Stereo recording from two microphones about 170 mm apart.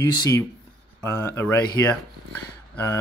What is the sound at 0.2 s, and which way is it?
Speech, 20° left (ahead or behind).